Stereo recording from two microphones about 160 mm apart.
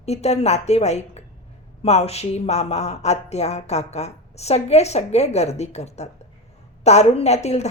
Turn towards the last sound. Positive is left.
turn(degrees=45)  # may be behind; listen again after turning